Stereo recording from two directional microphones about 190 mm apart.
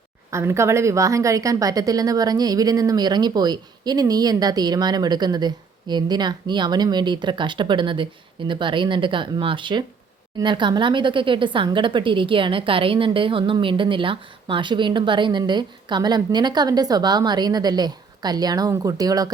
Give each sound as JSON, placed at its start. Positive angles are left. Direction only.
{"t": 0.3, "sound": "a woman's voice", "side_deg": -15}